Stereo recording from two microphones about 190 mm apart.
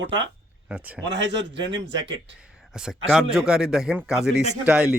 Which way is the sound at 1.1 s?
70° right (ahead or behind).